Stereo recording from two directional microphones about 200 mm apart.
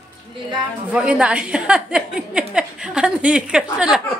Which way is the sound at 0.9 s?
5° right (ahead or behind).